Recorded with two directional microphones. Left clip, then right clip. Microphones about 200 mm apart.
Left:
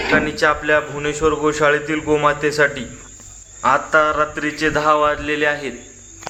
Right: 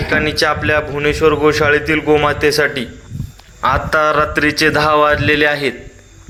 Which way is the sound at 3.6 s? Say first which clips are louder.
Right 1 dB; 25° right (ahead or behind).